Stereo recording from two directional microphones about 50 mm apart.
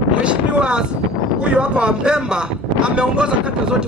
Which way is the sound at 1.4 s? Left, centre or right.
Right.